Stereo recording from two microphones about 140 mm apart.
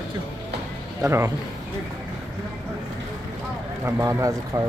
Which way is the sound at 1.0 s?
20° right (ahead or behind).